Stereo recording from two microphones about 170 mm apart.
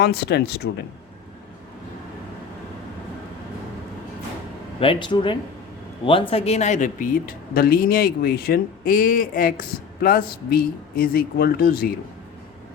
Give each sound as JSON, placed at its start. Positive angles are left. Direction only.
{"t": 0.0, "sound": "speech", "side_deg": 70}
{"t": 4.8, "sound": "speech", "side_deg": 30}